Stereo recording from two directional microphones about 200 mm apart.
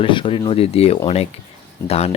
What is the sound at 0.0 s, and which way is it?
Speech, 25° left (ahead or behind).